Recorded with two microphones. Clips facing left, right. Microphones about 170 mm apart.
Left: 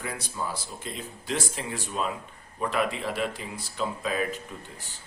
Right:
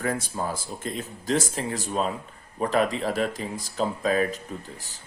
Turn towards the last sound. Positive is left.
turn(degrees=-40)  # may be behind; listen again after turning